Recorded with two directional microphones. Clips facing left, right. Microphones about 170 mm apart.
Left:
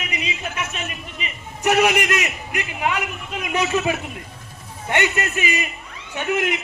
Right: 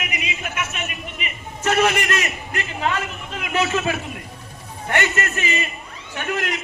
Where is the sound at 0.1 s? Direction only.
30° left (ahead or behind).